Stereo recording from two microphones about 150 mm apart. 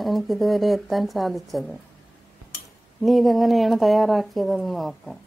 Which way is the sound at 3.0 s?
Centre (ahead or behind).